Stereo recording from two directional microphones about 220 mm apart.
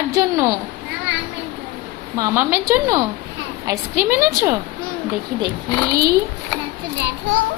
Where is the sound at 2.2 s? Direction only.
10° right (ahead or behind).